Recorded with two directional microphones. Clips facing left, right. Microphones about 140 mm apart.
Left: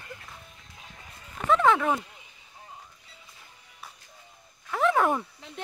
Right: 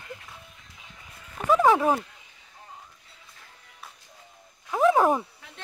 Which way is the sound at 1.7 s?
25° right (ahead or behind).